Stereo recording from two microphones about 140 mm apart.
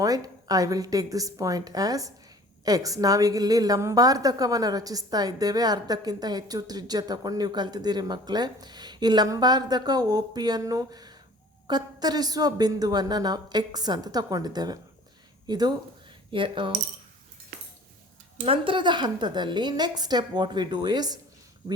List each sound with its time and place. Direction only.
0.0 s a woman's voice: 25° right (ahead or behind)
18.4 s a woman's voice: 40° right (ahead or behind)